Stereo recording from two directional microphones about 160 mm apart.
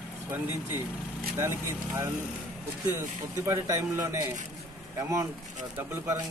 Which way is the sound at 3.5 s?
20° right (ahead or behind).